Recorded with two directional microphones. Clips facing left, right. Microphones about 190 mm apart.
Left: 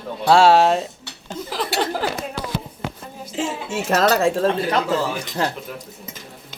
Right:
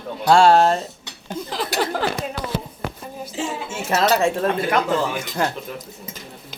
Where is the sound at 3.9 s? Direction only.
40° left (ahead or behind).